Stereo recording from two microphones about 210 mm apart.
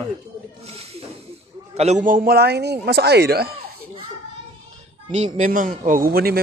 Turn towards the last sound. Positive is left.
turn(degrees=-45)  # may be behind; listen again after turning